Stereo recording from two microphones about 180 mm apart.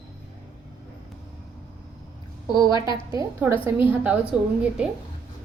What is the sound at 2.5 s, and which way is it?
A woman's voice, 25° right (ahead or behind).